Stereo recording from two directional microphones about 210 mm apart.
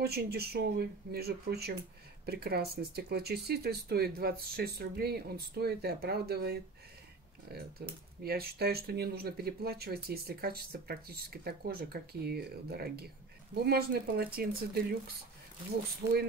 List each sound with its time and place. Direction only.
0.0 s speech: 50° right (ahead or behind)